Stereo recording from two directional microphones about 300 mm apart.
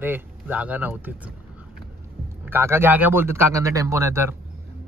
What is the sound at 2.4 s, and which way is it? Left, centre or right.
Speech, centre.